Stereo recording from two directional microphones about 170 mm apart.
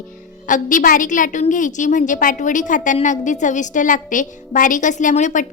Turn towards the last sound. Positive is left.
turn(degrees=45)  # may be behind; listen again after turning